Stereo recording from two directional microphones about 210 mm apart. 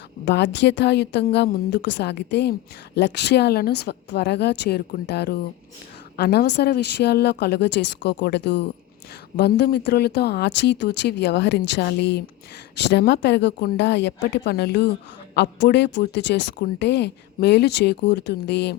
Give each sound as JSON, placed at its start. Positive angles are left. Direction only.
{"t": 0.3, "sound": "a woman's voice", "side_deg": 55}